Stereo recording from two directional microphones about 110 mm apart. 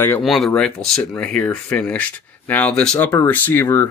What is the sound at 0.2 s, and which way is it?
Speech, centre (ahead or behind).